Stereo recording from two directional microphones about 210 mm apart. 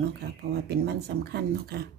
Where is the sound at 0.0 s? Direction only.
50° right (ahead or behind).